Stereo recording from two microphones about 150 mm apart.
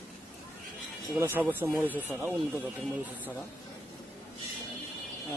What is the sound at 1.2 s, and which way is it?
Speech, 15° right (ahead or behind).